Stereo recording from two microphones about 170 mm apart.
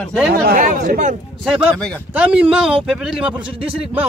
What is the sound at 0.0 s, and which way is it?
Speech, 5° left (ahead or behind).